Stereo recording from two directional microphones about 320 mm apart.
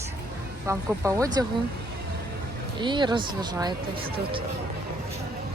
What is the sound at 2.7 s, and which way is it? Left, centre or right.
Speech, centre.